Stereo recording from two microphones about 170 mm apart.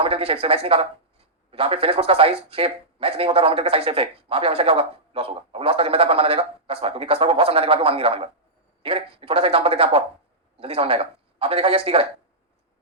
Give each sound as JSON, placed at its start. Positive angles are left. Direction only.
{"t": 0.0, "sound": "speech", "side_deg": -35}